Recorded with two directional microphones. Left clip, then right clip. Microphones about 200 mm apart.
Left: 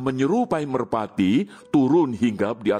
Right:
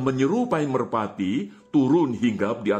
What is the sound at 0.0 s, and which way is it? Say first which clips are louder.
A man's voice: left 1 dB; 50° left (ahead or behind).